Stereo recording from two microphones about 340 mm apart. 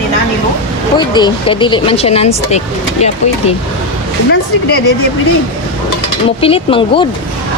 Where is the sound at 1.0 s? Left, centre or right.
Centre.